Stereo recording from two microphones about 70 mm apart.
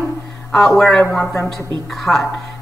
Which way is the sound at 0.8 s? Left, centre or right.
Centre.